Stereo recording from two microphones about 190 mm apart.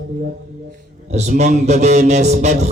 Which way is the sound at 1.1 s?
35° right (ahead or behind).